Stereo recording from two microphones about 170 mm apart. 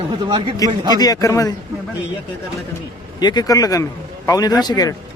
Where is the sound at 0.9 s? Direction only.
20° left (ahead or behind).